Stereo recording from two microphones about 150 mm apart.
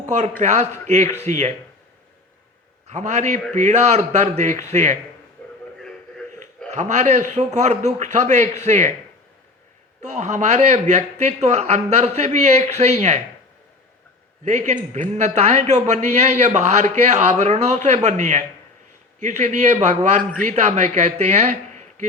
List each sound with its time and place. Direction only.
0.4 s a man's voice: 50° right (ahead or behind)
2.9 s a man's voice: 50° right (ahead or behind)
6.7 s a man's voice: 50° right (ahead or behind)
10.0 s a man's voice: 50° right (ahead or behind)
14.4 s a man's voice: 50° right (ahead or behind)